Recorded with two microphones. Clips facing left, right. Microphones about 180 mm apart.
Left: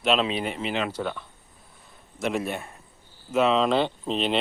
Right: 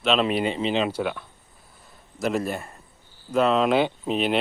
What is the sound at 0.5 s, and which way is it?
Speech, 20° right (ahead or behind).